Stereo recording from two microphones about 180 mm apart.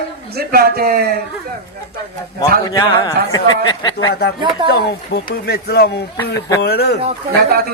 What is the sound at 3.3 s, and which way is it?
Speech, 20° left (ahead or behind).